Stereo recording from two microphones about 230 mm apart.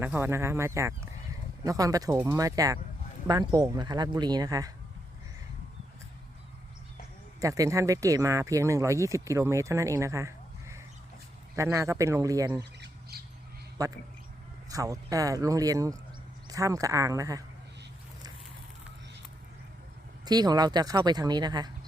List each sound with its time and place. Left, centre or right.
0.0 s speech: centre
7.4 s speech: centre
12.8 s squawk: right
13.8 s speech: centre
20.2 s speech: centre